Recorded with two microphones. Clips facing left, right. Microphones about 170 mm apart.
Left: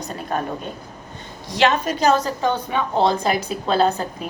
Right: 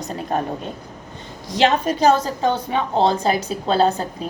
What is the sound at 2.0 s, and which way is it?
A woman's voice, 30° right (ahead or behind).